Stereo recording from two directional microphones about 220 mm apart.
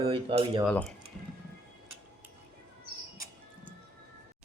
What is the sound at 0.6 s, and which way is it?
Speech, 5° left (ahead or behind).